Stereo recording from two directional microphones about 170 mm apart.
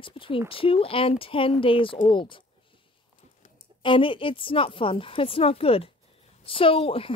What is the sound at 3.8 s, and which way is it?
A woman's voice, 30° left (ahead or behind).